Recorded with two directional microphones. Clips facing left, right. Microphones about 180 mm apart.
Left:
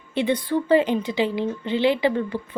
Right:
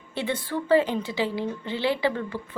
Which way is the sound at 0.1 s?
20° left (ahead or behind).